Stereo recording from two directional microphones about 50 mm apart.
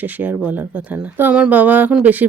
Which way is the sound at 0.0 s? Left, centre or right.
Right.